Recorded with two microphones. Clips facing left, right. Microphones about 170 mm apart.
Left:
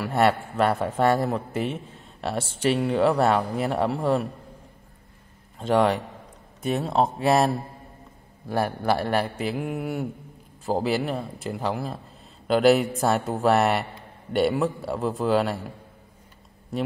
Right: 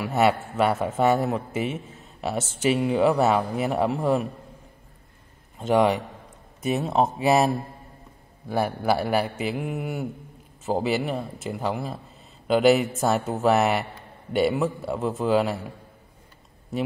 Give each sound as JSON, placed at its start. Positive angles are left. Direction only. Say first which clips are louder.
{"t": 0.0, "sound": "a man's voice", "louder": "even", "side_deg": -5}
{"t": 5.6, "sound": "a man's voice", "louder": "right 1 dB", "side_deg": -5}